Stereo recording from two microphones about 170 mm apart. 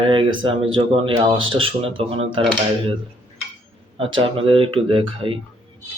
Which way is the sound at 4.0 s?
30° right (ahead or behind).